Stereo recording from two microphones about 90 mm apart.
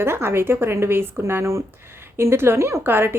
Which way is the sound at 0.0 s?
25° right (ahead or behind).